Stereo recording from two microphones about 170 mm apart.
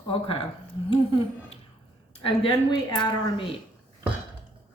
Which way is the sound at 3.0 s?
25° left (ahead or behind).